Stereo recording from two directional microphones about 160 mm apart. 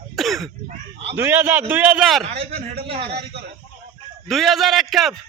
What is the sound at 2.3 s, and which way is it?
Speech, 40° right (ahead or behind).